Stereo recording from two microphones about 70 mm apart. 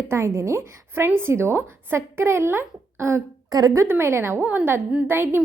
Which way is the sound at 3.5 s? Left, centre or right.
Right.